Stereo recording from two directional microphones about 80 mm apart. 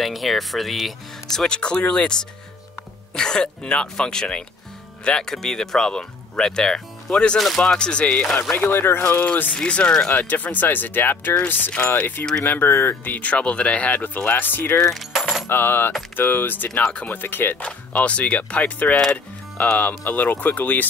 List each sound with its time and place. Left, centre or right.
0.0 s speech: centre
3.2 s speech: centre
8.4 s speech: left
9.0 s speech: centre
15.0 s coin: centre
15.4 s speech: left
17.6 s speech: centre